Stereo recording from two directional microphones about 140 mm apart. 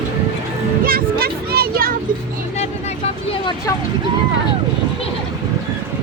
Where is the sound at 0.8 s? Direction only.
90° right.